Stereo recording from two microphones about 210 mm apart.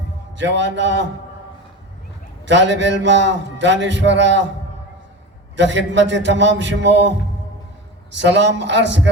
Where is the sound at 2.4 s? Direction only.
60° right (ahead or behind).